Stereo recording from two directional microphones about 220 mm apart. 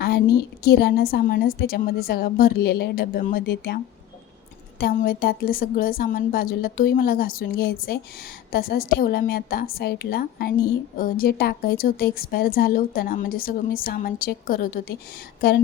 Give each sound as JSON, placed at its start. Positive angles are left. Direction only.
{"t": 0.0, "sound": "a woman's voice", "side_deg": 45}
{"t": 4.8, "sound": "a woman's voice", "side_deg": 45}